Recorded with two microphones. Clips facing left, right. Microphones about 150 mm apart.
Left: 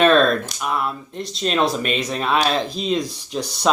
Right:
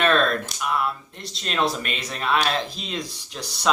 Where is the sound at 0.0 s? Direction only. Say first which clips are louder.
Left 6 dB; 25° left (ahead or behind).